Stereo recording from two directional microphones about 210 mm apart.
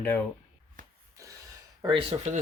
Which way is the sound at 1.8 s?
25° right (ahead or behind).